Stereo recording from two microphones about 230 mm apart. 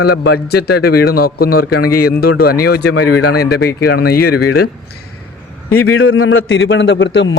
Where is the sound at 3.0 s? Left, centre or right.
Left.